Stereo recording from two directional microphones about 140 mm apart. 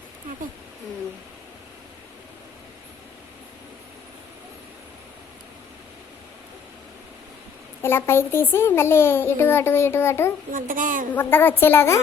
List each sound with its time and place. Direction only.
7.8 s a child's voice: 15° left (ahead or behind)
10.5 s a woman's voice: 75° right (ahead or behind)
11.1 s a child's voice: 15° left (ahead or behind)